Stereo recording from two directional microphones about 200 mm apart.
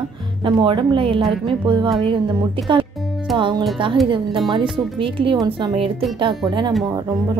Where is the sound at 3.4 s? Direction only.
25° right (ahead or behind).